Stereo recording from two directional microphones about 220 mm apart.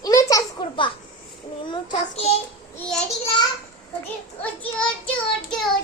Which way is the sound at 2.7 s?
5° left (ahead or behind).